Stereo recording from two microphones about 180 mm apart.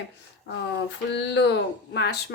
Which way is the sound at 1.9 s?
70° left (ahead or behind).